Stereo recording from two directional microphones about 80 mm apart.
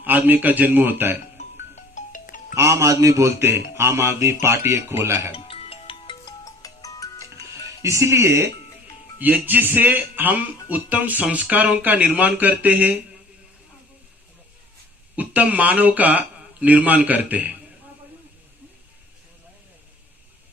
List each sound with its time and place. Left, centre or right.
0.0 s speech: right
2.6 s speech: right
5.9 s music: left
6.2 s music: left
7.8 s speech: right
9.1 s speech: right
15.1 s speech: centre